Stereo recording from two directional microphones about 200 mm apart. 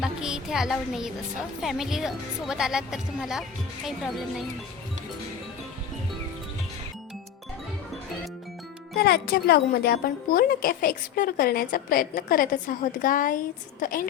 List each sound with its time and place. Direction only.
0.0 s music: 5° right (ahead or behind)
1.6 s speech: centre (ahead or behind)
9.0 s speech: 50° left (ahead or behind)